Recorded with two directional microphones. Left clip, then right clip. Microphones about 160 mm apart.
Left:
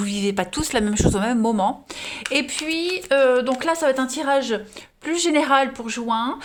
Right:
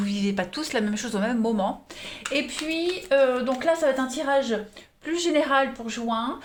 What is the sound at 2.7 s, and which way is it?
A woman's voice, 70° left (ahead or behind).